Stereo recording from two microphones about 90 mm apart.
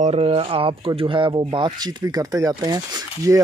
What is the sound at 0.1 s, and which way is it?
Speech, 90° right.